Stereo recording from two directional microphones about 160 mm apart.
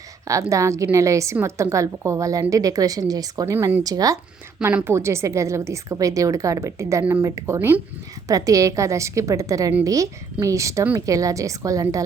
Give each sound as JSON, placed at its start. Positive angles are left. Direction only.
{"t": 0.5, "sound": "a woman's voice", "side_deg": -20}